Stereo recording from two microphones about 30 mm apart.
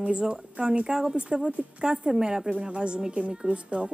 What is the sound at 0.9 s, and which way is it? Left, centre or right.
A woman's voice, right.